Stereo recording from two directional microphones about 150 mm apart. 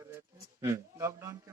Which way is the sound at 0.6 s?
20° right (ahead or behind).